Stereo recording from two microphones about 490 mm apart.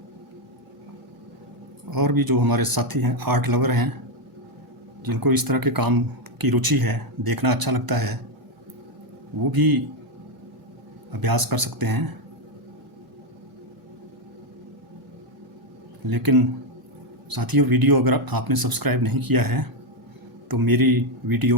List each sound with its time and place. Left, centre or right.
1.9 s speech: right
5.0 s speech: right
9.4 s speech: right
11.1 s speech: right
16.0 s speech: right